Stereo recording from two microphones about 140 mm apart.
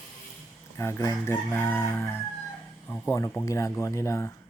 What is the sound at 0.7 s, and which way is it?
Speech, 20° left (ahead or behind).